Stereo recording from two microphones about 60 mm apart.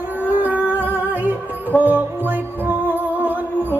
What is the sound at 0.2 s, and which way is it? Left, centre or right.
Music, right.